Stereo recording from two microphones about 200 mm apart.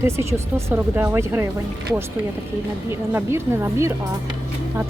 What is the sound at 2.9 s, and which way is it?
Speech, 15° right (ahead or behind).